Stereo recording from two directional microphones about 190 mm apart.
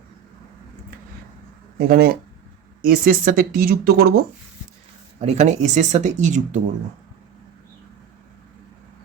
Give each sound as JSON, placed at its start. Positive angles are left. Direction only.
{"t": 1.9, "sound": "speech", "side_deg": -50}
{"t": 5.2, "sound": "speech", "side_deg": -35}